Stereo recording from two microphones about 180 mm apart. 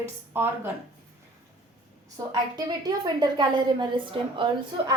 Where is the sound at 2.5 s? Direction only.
20° right (ahead or behind).